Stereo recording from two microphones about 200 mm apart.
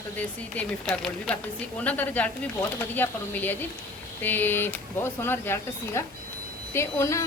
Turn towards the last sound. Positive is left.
turn(degrees=15)  # may be behind; listen again after turning